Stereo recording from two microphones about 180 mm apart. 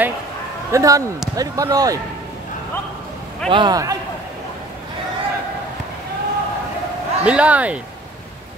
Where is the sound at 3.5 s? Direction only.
25° right (ahead or behind).